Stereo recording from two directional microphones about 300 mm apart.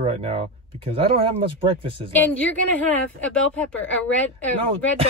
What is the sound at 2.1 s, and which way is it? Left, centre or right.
Speech, centre.